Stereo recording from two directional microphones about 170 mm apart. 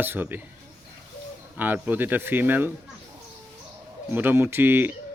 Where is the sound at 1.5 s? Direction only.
10° right (ahead or behind).